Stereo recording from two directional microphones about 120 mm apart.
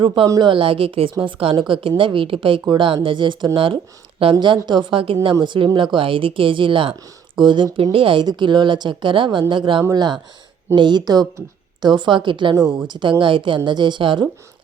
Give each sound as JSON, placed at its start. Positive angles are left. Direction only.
{"t": 0.0, "sound": "a woman's voice", "side_deg": -45}